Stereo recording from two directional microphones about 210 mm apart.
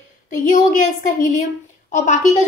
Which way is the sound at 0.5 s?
40° left (ahead or behind).